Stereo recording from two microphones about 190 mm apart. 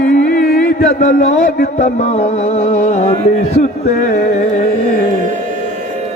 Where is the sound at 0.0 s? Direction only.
50° left (ahead or behind).